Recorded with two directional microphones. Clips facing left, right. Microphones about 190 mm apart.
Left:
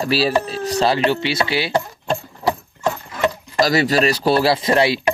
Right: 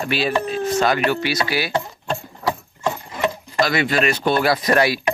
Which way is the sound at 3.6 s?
35° left (ahead or behind).